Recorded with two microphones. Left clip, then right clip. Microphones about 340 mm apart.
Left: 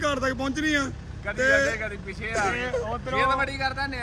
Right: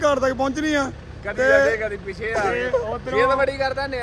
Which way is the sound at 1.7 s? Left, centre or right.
Centre.